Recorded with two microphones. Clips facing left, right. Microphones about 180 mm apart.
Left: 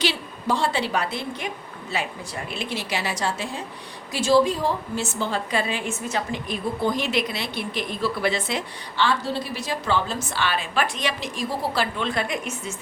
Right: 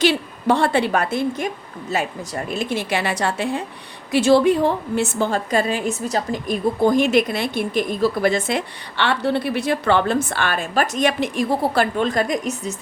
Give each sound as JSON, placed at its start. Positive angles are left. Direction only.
{"t": 0.0, "sound": "a woman's voice", "side_deg": -60}